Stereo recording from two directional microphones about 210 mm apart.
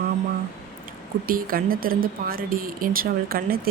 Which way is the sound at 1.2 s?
45° right (ahead or behind).